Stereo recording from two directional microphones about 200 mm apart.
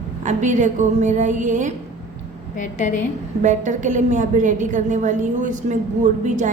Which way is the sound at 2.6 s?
40° left (ahead or behind).